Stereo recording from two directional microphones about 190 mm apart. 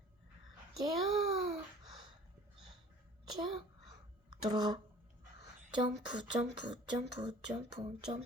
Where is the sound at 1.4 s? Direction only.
30° right (ahead or behind).